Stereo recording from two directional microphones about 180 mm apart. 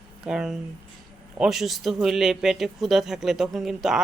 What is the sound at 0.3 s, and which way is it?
Speech, 5° right (ahead or behind).